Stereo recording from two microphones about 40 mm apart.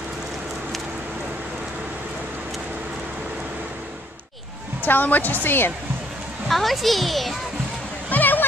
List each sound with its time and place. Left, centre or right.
4.8 s a woman's voice: left
6.5 s a child's voice: centre
8.1 s a sound: left